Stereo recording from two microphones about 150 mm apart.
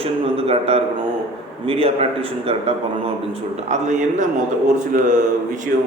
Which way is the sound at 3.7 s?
55° right (ahead or behind).